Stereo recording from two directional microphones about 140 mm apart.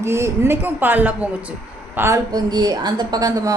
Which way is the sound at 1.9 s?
20° right (ahead or behind).